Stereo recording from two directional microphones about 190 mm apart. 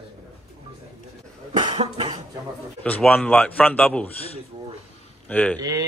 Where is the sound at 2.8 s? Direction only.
5° left (ahead or behind).